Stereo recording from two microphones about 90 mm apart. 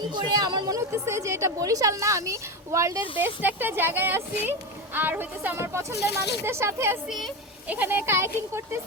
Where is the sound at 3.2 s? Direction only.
20° right (ahead or behind).